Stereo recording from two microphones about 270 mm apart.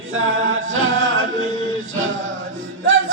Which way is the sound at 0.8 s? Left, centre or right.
Right.